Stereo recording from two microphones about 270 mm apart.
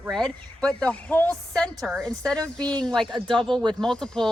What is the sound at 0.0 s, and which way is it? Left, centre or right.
A woman's voice, centre.